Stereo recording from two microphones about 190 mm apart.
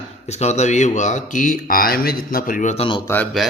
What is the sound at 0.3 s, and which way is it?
Speech, 35° left (ahead or behind).